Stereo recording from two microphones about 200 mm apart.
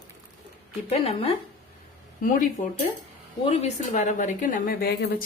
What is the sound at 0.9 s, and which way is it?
Speech, 30° left (ahead or behind).